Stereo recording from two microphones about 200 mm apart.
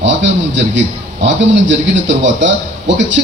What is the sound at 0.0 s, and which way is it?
Speech, 65° right (ahead or behind).